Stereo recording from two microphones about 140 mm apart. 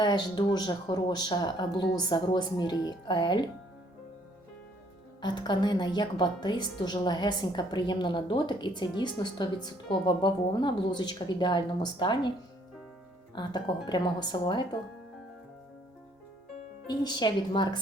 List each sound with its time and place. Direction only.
0.0 s a woman's voice: 30° left (ahead or behind)
5.2 s a woman's voice: 30° left (ahead or behind)
13.3 s a woman's voice: 30° left (ahead or behind)
16.9 s a woman's voice: 30° left (ahead or behind)